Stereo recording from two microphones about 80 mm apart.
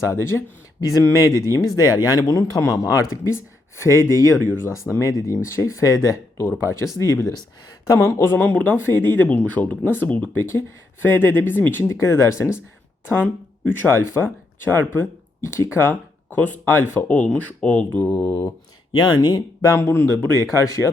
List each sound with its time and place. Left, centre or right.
0.1 s speech: left
11.9 s speech: left
13.1 s speech: left
18.0 s speech: left
18.9 s speech: left
19.7 s speech: left